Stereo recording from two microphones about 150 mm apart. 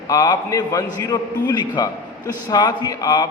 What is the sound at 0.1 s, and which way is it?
A man's voice, 25° left (ahead or behind).